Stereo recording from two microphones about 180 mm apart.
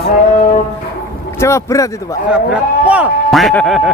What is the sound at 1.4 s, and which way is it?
Speech, 15° left (ahead or behind).